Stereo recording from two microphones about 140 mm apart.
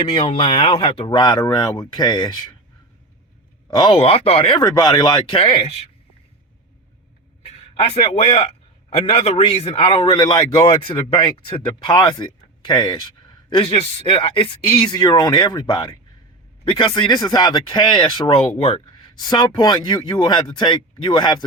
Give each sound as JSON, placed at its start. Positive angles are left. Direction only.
{"t": 0.0, "sound": "a man's voice", "side_deg": 40}
{"t": 3.8, "sound": "a man's voice", "side_deg": 35}
{"t": 7.4, "sound": "a man's voice", "side_deg": 45}